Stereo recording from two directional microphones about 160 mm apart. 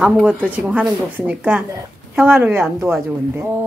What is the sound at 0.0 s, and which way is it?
A woman's voice, 10° right (ahead or behind).